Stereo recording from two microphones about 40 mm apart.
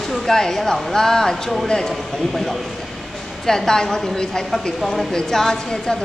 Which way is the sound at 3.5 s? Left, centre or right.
Centre.